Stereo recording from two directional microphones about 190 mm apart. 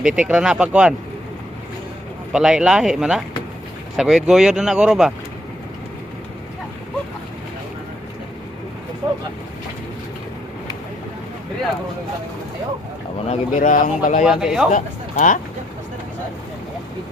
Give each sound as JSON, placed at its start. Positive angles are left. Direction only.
{"t": 0.0, "sound": "speech", "side_deg": -5}
{"t": 2.3, "sound": "speech", "side_deg": -5}
{"t": 13.2, "sound": "a man's voice", "side_deg": 40}
{"t": 14.3, "sound": "speech", "side_deg": -5}
{"t": 14.7, "sound": "speech", "side_deg": 40}